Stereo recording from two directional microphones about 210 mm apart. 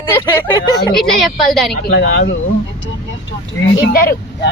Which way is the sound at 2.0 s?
50° left (ahead or behind).